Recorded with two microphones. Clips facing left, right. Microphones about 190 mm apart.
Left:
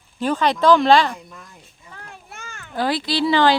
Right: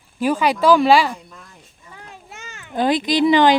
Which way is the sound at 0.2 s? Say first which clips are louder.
Right 1 dB; 10° right (ahead or behind).